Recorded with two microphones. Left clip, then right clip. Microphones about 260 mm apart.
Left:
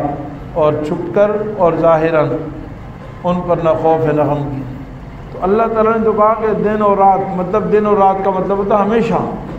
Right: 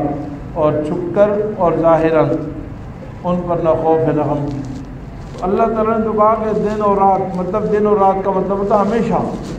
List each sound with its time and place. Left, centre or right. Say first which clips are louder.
0.6 s a man's voice: left 2 dB; left
5.4 s a man's voice: left 3 dB; left